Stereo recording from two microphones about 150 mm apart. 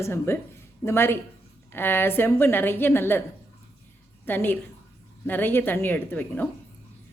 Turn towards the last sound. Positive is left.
turn(degrees=10)  # may be behind; listen again after turning